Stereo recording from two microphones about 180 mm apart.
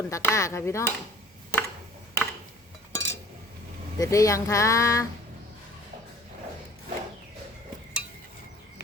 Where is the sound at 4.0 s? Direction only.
20° left (ahead or behind).